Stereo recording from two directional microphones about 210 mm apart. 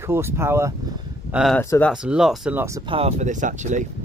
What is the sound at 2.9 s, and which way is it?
Speech, 30° right (ahead or behind).